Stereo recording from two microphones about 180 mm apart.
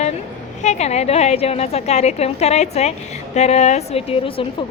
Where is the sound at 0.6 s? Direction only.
40° left (ahead or behind).